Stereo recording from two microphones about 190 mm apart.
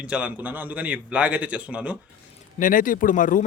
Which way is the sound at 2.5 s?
45° left (ahead or behind).